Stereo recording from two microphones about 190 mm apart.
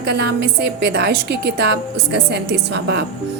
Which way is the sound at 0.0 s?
60° right (ahead or behind).